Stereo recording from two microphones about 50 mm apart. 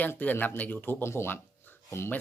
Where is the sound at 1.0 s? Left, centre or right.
Left.